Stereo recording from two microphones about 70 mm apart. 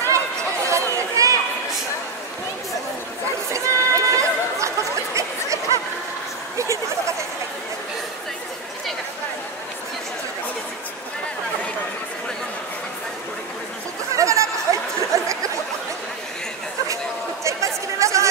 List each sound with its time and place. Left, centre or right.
0.0 s chatter: right
3.5 s chatter: right
14.1 s a sound: right
16.8 s chatter: right